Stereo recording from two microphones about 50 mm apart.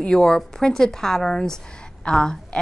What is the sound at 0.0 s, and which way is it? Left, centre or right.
A woman's voice, centre.